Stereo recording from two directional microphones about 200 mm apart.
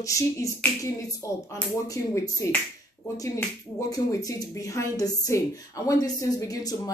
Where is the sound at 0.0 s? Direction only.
15° left (ahead or behind).